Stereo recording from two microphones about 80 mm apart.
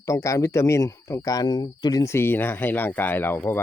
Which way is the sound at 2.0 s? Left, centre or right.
Left.